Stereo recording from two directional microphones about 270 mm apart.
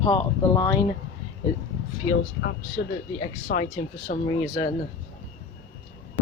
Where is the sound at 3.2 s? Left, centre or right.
Left.